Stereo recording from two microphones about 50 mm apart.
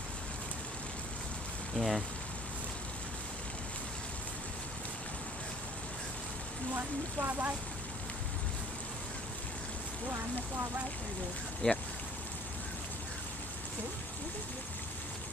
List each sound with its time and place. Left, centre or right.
1.8 s speech: centre
6.7 s speech: right
11.6 s speech: centre